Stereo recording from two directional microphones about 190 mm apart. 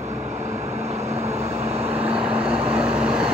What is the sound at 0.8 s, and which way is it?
Vehicle, 35° right (ahead or behind).